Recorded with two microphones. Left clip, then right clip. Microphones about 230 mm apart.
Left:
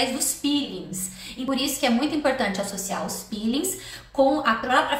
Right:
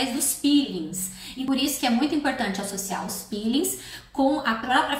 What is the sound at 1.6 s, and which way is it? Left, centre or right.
A woman's voice, centre.